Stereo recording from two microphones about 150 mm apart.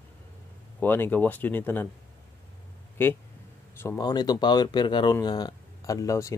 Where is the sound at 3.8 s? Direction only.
20° left (ahead or behind).